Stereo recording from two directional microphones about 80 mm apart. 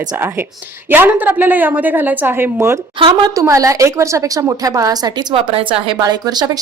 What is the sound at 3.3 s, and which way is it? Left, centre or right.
A woman's voice, right.